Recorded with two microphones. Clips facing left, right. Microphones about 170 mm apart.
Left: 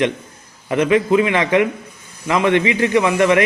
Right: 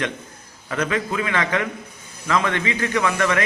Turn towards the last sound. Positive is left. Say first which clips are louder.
# left 7 dB
turn(degrees=20)  # may be behind; listen again after turning